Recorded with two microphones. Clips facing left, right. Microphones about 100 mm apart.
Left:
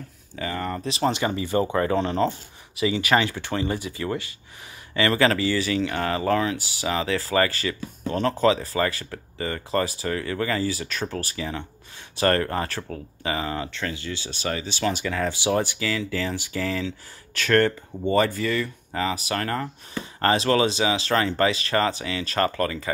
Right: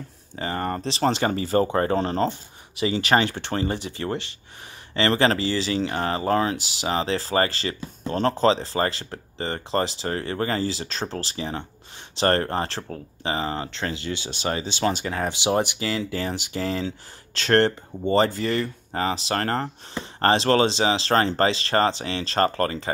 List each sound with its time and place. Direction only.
0.4 s speech: 40° right (ahead or behind)
16.3 s speech: 25° right (ahead or behind); by 19.7 s 40° right (ahead or behind)
19.9 s speech: 30° right (ahead or behind)